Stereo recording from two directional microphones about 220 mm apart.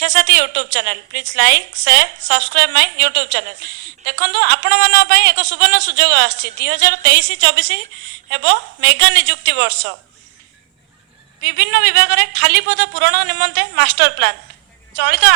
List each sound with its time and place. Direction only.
0.0 s a woman's voice: 50° right (ahead or behind)
11.4 s a woman's voice: 50° right (ahead or behind)